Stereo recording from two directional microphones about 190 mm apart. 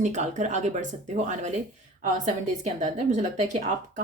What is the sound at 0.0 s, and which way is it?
A woman's voice, 40° right (ahead or behind).